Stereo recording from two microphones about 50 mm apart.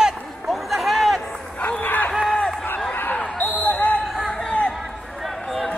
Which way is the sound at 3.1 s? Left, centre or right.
Left.